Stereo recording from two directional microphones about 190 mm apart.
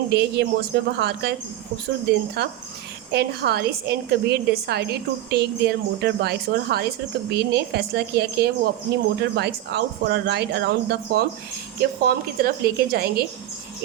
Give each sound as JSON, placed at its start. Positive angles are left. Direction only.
{"t": 0.1, "sound": "a woman's voice", "side_deg": -60}
{"t": 2.4, "sound": "a woman's voice", "side_deg": -55}